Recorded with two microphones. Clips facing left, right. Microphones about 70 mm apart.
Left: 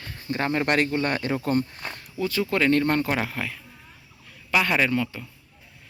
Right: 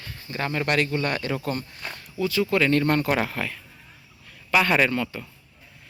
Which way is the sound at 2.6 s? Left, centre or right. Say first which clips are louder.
Left 3 dB; left.